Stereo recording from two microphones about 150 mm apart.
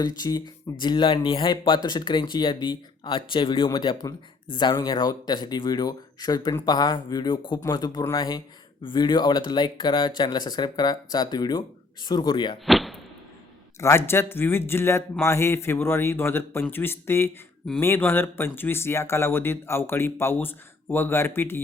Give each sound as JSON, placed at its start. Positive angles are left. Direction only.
{"t": 0.0, "sound": "speech", "side_deg": 25}
{"t": 12.6, "sound": "a sound", "side_deg": 0}
{"t": 13.7, "sound": "speech", "side_deg": 20}